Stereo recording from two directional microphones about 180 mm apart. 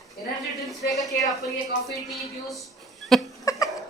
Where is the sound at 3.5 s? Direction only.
20° left (ahead or behind).